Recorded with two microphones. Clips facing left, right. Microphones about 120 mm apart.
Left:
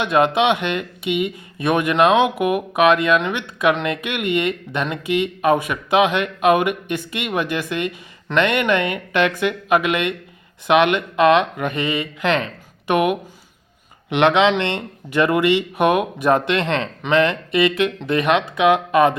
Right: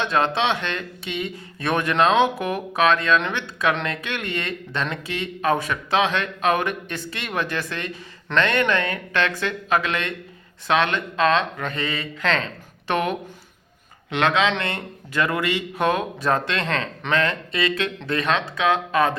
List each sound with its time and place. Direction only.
0.0 s speech: 15° left (ahead or behind)